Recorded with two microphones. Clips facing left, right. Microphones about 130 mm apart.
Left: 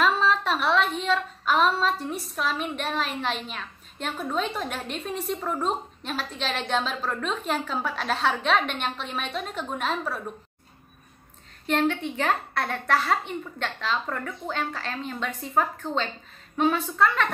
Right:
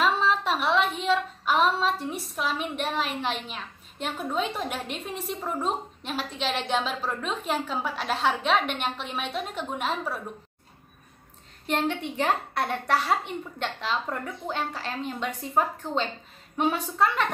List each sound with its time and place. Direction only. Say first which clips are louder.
0.0 s a sound: left 1 dB; 15° right (ahead or behind)
2.3 s a woman's voice: left 1 dB; 15° right (ahead or behind)
11.6 s a woman's voice: left 3 dB; 15° right (ahead or behind)